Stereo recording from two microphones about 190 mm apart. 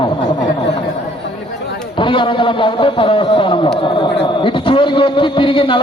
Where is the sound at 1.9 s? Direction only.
25° left (ahead or behind).